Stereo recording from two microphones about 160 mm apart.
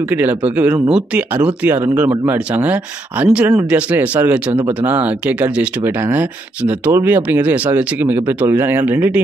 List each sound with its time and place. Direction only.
0.1 s speech: 10° right (ahead or behind)
4.5 s speech: 30° right (ahead or behind)
4.8 s speech: 10° right (ahead or behind)